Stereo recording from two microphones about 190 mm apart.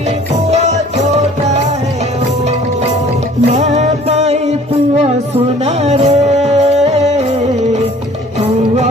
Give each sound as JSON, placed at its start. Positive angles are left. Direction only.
{"t": 0.5, "sound": "music", "side_deg": -35}
{"t": 3.5, "sound": "music", "side_deg": -35}